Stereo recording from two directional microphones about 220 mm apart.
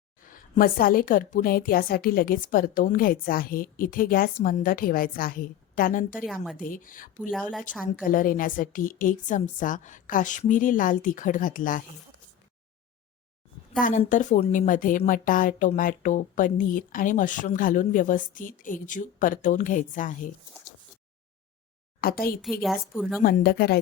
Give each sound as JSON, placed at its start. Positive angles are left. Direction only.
{"t": 0.3, "sound": "speech", "side_deg": 40}
{"t": 6.2, "sound": "a woman's voice", "side_deg": 0}
{"t": 6.6, "sound": "speech", "side_deg": 40}
{"t": 7.2, "sound": "a woman's voice", "side_deg": 0}
{"t": 8.0, "sound": "speech", "side_deg": 40}
{"t": 13.8, "sound": "speech", "side_deg": 35}
{"t": 22.0, "sound": "speech", "side_deg": 40}
{"t": 22.6, "sound": "a woman's voice", "side_deg": 0}
{"t": 23.2, "sound": "speech", "side_deg": 45}